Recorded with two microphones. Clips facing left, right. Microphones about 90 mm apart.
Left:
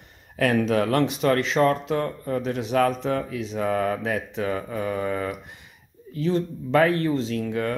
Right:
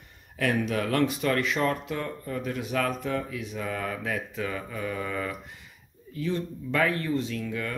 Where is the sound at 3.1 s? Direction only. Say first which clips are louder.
Left 5 dB; 50° left (ahead or behind).